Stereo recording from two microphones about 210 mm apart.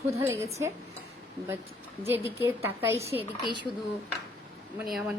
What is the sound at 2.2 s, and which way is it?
Speech, 10° right (ahead or behind).